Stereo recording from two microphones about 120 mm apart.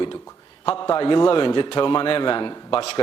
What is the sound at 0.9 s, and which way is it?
A man's voice, 40° left (ahead or behind).